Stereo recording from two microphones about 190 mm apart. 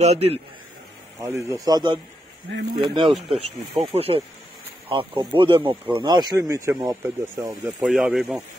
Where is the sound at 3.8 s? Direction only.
30° right (ahead or behind).